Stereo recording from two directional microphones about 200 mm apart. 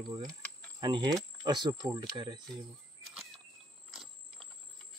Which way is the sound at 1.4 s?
20° right (ahead or behind).